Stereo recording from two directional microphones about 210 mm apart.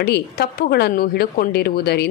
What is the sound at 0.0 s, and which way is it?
A woman's voice, 50° left (ahead or behind).